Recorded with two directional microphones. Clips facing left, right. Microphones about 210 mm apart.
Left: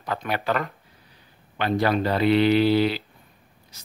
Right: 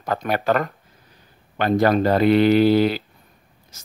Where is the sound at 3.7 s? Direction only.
45° right (ahead or behind).